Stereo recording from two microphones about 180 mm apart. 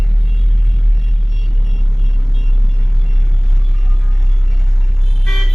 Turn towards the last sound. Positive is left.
turn(degrees=0)  # may be behind; listen again after turning